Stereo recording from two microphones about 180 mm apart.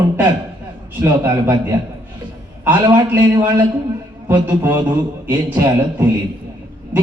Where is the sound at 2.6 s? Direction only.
10° right (ahead or behind).